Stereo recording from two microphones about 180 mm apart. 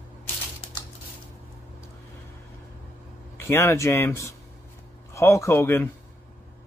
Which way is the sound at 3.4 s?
15° left (ahead or behind).